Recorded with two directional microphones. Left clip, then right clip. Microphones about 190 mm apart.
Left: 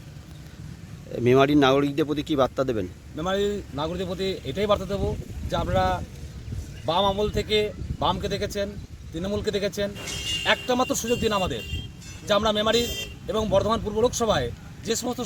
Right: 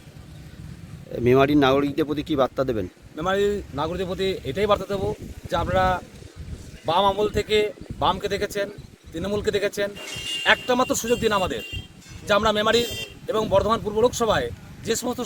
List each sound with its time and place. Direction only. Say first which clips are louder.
1.1 s speech: right 1 dB; centre (ahead or behind)
12.8 s speech: right 1 dB; 50° left (ahead or behind)
13.5 s speech: right 2 dB; 5° right (ahead or behind)
14.9 s a man's voice: right 1 dB; 30° right (ahead or behind)